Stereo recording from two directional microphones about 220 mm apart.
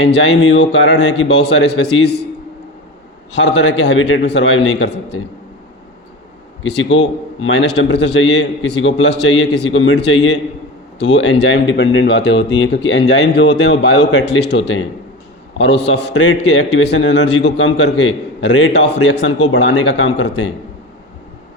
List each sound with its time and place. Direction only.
0.0 s a man's voice: 55° left (ahead or behind)
3.3 s a man's voice: 55° left (ahead or behind)
6.6 s a man's voice: 55° left (ahead or behind)
15.6 s a man's voice: 55° left (ahead or behind)